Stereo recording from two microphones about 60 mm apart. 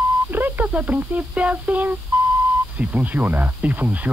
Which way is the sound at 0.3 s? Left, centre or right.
Right.